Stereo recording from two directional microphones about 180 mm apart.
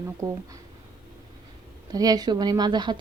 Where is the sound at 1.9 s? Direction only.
20° right (ahead or behind).